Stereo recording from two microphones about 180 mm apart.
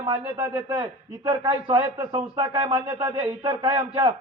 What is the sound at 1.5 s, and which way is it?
A man's voice, 25° right (ahead or behind).